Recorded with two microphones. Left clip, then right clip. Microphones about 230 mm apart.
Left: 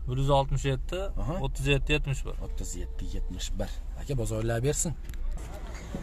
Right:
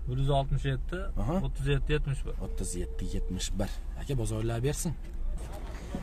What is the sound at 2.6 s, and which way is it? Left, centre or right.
Speech, centre.